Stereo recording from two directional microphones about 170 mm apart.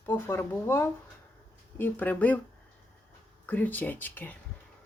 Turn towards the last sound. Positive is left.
turn(degrees=10)  # may be behind; listen again after turning